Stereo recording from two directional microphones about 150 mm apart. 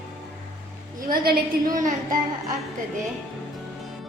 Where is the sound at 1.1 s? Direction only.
75° right (ahead or behind).